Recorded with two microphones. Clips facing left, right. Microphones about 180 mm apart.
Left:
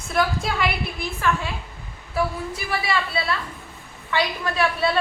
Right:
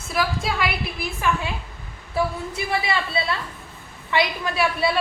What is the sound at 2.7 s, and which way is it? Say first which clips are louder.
A woman's voice: right 1 dB; 25° right (ahead or behind).